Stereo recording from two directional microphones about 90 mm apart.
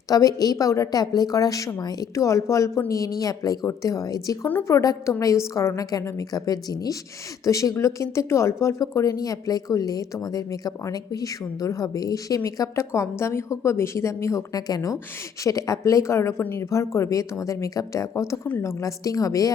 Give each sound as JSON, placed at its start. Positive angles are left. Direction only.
{"t": 0.1, "sound": "a woman's voice", "side_deg": 40}
{"t": 2.1, "sound": "speech", "side_deg": 35}